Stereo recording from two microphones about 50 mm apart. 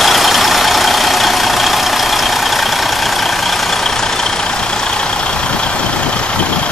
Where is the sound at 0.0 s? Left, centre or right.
Centre.